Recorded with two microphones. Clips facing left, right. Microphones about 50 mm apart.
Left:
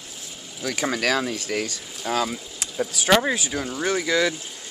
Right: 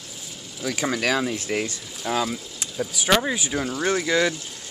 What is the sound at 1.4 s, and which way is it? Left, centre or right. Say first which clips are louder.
Speech: right 1 dB; centre.